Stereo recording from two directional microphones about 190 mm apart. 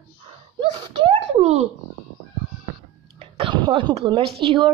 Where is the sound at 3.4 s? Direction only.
25° right (ahead or behind).